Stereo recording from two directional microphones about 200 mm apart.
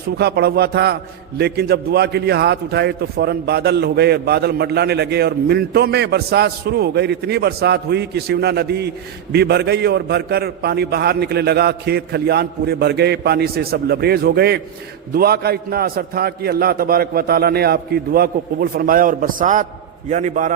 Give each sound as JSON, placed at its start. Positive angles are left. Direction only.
{"t": 0.2, "sound": "a man's voice", "side_deg": -55}